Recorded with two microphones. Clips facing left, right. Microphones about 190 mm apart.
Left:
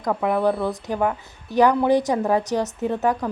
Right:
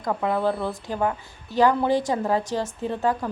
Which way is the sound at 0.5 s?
Centre (ahead or behind).